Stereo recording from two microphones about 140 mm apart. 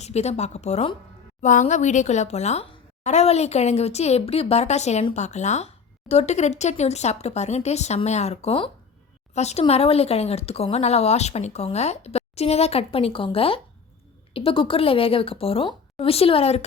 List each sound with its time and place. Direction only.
0.0 s speech: 50° left (ahead or behind)
9.3 s speech: 50° left (ahead or behind)